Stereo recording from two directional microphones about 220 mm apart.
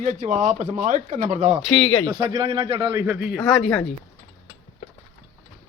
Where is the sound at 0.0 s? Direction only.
35° right (ahead or behind).